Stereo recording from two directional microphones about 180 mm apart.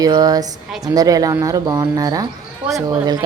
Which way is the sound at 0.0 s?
20° right (ahead or behind).